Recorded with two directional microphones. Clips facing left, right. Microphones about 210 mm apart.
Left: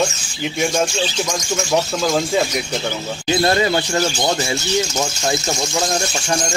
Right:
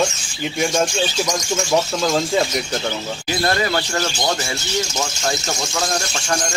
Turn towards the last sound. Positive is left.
turn(degrees=20)  # may be behind; listen again after turning